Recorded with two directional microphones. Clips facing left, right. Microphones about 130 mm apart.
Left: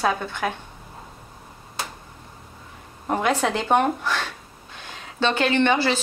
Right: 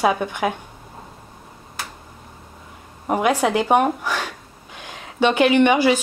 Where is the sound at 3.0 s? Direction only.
10° right (ahead or behind).